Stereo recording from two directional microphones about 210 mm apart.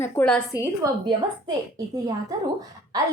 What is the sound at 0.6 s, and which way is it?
A woman's voice, 15° right (ahead or behind).